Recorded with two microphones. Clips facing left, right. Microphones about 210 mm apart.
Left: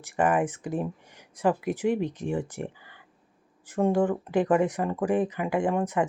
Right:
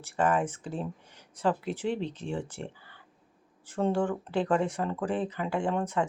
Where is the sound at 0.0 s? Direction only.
15° left (ahead or behind).